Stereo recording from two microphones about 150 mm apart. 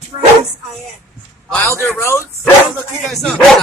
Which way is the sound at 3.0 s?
Centre (ahead or behind).